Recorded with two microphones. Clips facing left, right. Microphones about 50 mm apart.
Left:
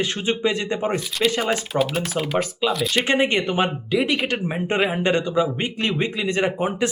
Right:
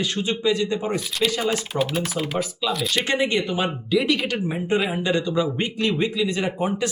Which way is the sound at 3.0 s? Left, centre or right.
Left.